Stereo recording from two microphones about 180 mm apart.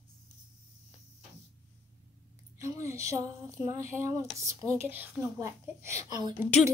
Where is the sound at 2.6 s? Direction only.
15° right (ahead or behind).